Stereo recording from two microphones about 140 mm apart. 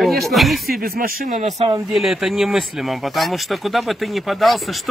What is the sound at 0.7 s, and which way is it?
Speech, 90° right.